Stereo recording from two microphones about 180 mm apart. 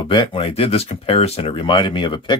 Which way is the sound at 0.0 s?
25° left (ahead or behind).